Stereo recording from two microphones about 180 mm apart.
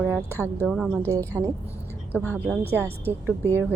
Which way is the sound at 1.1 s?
15° right (ahead or behind).